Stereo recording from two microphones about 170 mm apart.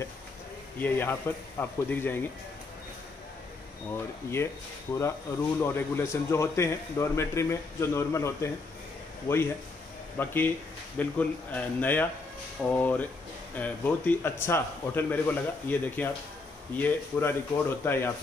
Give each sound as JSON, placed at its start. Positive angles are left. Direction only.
{"t": 0.7, "sound": "a man's voice", "side_deg": 10}
{"t": 3.9, "sound": "a man's voice", "side_deg": 15}